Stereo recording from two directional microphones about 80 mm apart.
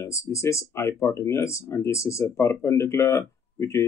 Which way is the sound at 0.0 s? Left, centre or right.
Left.